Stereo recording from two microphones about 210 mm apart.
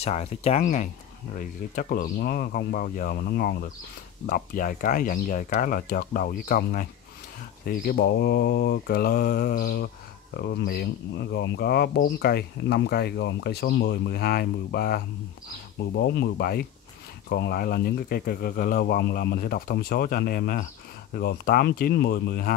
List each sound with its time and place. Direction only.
0.0 s speech: 30° left (ahead or behind)